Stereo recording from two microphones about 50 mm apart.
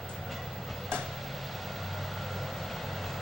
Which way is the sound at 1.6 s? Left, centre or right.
Centre.